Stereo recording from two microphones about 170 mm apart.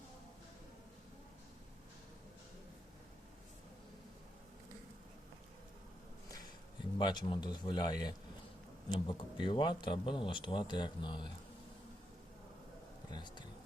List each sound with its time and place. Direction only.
7.0 s speech: 25° left (ahead or behind)
13.1 s speech: 25° left (ahead or behind)